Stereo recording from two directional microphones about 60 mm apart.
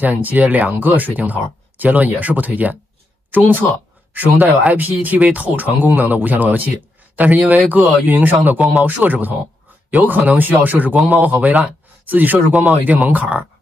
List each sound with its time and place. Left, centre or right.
0.0 s speech: right